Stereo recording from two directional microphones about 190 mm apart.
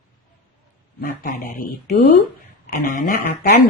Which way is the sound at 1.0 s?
45° left (ahead or behind).